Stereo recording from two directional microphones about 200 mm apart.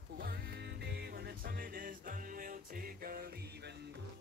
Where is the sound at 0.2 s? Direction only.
50° right (ahead or behind).